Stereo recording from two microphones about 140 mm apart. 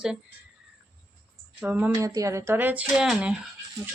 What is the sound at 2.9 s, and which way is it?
Speech, 5° right (ahead or behind).